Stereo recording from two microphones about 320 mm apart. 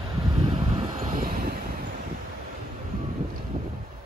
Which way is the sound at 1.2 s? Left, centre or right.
Right.